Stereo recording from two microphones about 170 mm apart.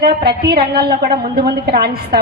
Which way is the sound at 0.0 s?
70° right (ahead or behind).